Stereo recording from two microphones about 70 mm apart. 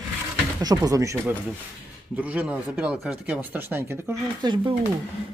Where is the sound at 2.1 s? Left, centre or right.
Right.